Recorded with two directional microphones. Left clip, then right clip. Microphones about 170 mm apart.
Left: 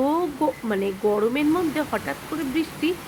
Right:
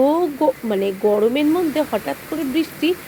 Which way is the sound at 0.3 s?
15° right (ahead or behind).